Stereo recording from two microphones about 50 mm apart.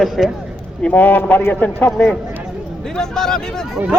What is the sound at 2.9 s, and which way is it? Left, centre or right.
Speech, centre.